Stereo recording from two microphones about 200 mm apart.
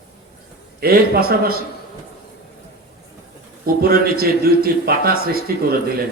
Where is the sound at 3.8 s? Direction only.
50° right (ahead or behind).